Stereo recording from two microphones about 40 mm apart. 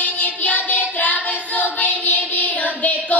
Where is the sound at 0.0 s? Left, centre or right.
Left.